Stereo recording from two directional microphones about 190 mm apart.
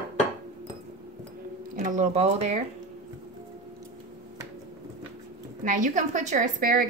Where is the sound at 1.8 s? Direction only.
40° right (ahead or behind).